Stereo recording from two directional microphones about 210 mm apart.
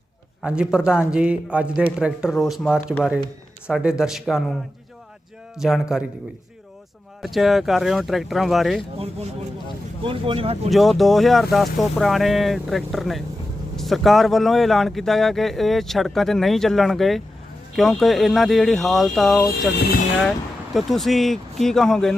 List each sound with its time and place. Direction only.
0.4 s a man's voice: 5° right (ahead or behind)
5.5 s a man's voice: centre (ahead or behind)
7.2 s a man's voice: centre (ahead or behind)
10.0 s speech: 25° right (ahead or behind)
10.7 s a man's voice: centre (ahead or behind)
19.5 s speech: 50° left (ahead or behind)
20.7 s a man's voice: centre (ahead or behind)